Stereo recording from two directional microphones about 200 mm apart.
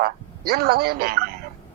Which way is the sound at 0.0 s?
50° right (ahead or behind).